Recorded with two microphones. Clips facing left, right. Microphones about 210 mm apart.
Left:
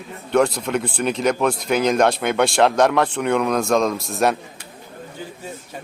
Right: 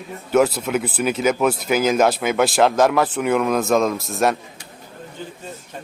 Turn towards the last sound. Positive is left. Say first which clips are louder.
# even
turn(degrees=0)  # may be behind; listen again after turning